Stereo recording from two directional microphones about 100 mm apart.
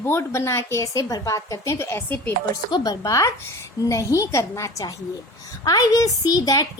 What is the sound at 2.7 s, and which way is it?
A woman's voice, 45° left (ahead or behind).